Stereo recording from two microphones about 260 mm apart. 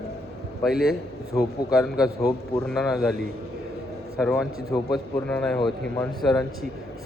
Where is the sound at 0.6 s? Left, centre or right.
Centre.